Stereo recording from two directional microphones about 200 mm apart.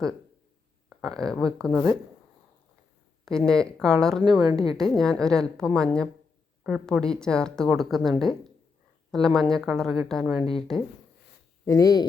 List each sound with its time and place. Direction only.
0.9 s a woman's voice: centre (ahead or behind)
3.2 s a woman's voice: 5° left (ahead or behind)
4.2 s a woman's voice: 20° right (ahead or behind)
4.7 s a woman's voice: centre (ahead or behind)
9.1 s a woman's voice: centre (ahead or behind)
11.6 s speech: 15° left (ahead or behind)